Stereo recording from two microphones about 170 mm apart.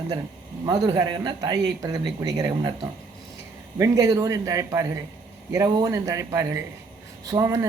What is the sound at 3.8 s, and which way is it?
Speech, 20° right (ahead or behind).